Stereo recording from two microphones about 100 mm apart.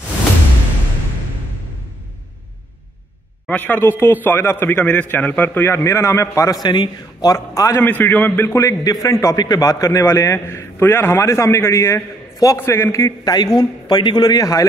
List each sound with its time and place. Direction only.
3.4 s a man's voice: 20° left (ahead or behind)
6.6 s a man's voice: 50° left (ahead or behind); by 7.8 s 30° left (ahead or behind)
7.8 s a man's voice: 15° left (ahead or behind)
8.5 s a man's voice: 35° left (ahead or behind)